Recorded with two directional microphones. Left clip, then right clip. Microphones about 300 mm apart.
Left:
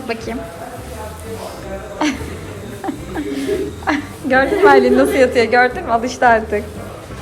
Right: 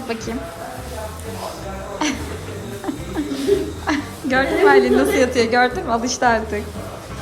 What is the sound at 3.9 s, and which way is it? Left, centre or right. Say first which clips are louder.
A woman's voice: left 5 dB; centre.